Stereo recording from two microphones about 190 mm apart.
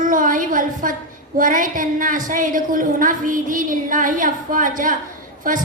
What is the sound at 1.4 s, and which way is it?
A woman's voice, 45° right (ahead or behind).